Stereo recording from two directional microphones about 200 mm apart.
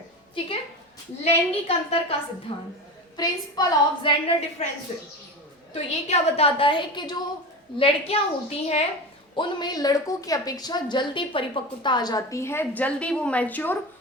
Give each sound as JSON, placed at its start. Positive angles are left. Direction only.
{"t": 1.2, "sound": "a woman's voice", "side_deg": 30}
{"t": 5.7, "sound": "a woman's voice", "side_deg": 30}